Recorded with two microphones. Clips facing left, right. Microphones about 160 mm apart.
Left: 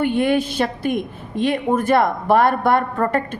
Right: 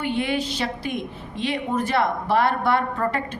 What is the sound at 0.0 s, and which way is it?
A woman's voice, 50° left (ahead or behind).